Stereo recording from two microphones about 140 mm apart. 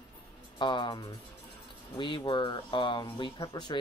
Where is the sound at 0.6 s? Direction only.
35° left (ahead or behind).